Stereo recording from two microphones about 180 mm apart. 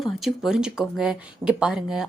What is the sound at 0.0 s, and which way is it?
Speech, centre (ahead or behind).